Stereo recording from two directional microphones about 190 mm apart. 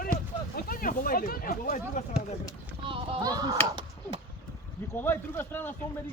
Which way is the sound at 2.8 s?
30° right (ahead or behind).